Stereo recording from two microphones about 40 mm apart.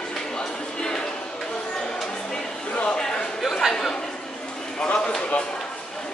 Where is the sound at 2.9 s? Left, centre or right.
Left.